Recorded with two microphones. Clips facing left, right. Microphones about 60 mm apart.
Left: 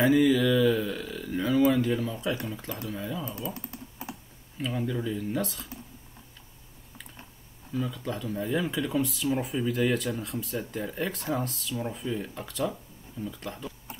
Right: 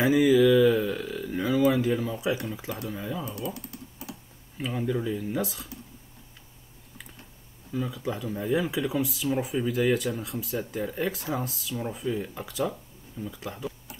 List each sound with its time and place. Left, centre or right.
0.0 s speech: centre
3.3 s typing: left
4.6 s speech: centre
7.7 s speech: centre